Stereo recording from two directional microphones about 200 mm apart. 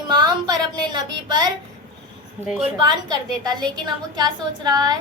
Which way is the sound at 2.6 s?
20° right (ahead or behind).